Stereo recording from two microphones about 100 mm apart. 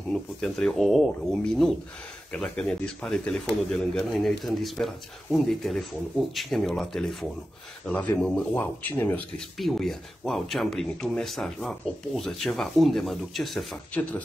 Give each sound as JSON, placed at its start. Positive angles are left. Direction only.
{"t": 0.1, "sound": "speech", "side_deg": 5}
{"t": 7.9, "sound": "speech", "side_deg": 15}
{"t": 9.6, "sound": "speech", "side_deg": 0}